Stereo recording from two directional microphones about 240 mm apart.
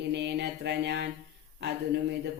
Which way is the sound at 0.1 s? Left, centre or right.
Right.